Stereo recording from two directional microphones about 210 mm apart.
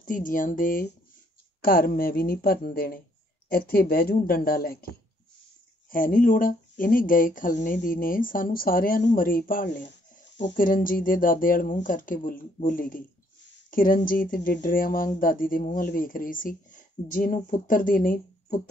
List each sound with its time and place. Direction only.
0.0 s speech: 40° left (ahead or behind)
9.8 s rub: 55° left (ahead or behind)
10.5 s speech: 40° left (ahead or behind)